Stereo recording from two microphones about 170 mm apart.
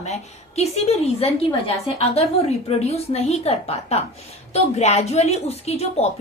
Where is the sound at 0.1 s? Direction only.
40° left (ahead or behind).